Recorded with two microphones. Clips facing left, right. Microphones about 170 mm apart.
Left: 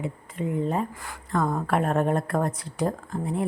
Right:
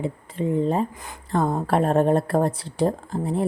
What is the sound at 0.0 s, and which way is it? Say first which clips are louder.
A woman's voice: right 4 dB; 30° right (ahead or behind).